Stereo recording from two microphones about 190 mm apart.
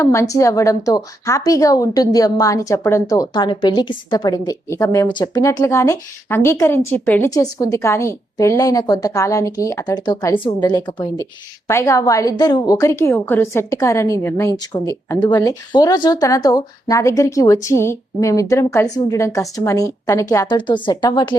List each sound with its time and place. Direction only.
0.0 s a woman's voice: 15° left (ahead or behind)